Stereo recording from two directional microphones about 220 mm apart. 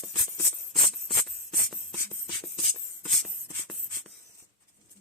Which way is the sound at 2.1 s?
25° left (ahead or behind).